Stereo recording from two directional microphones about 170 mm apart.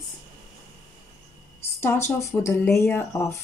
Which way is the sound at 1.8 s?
15° left (ahead or behind).